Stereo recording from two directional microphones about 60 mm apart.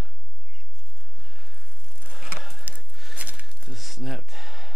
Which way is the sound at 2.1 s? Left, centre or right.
Centre.